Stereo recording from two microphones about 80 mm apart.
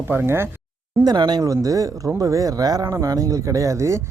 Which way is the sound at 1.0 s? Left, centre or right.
Right.